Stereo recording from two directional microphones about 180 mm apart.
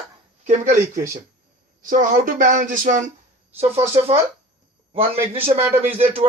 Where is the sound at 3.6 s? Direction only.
35° right (ahead or behind).